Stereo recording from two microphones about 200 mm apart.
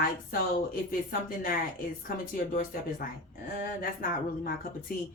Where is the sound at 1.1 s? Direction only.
45° left (ahead or behind).